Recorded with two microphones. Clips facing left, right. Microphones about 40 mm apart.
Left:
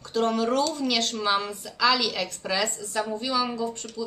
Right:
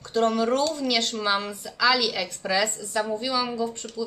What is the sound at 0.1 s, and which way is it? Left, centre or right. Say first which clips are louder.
Speech: right 2 dB; centre.